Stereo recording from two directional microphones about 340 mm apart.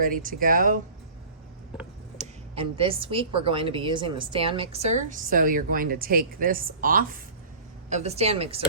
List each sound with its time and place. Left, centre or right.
0.0 s speech: right
2.1 s a woman's voice: centre